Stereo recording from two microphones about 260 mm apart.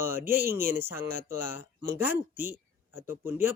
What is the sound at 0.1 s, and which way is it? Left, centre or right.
Speech, centre.